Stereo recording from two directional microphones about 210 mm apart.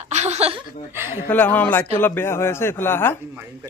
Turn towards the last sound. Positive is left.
turn(degrees=10)  # may be behind; listen again after turning